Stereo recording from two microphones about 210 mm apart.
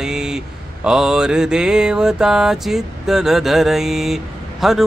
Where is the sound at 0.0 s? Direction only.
5° right (ahead or behind).